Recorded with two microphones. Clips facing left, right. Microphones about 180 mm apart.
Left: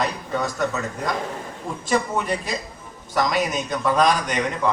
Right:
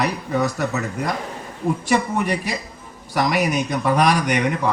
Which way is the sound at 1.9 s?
70° right (ahead or behind).